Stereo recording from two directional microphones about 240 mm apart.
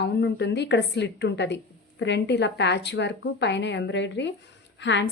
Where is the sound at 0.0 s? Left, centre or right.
Left.